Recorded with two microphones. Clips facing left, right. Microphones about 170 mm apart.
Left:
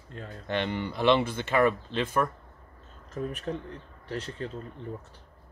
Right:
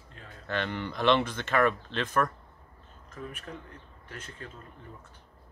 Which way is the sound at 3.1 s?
35° left (ahead or behind).